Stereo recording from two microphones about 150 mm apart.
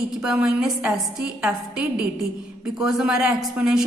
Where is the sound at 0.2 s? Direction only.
5° right (ahead or behind).